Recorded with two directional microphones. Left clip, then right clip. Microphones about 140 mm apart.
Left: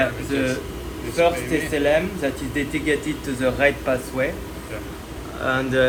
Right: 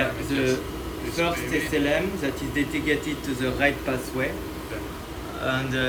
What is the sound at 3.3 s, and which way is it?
Speech, 35° left (ahead or behind).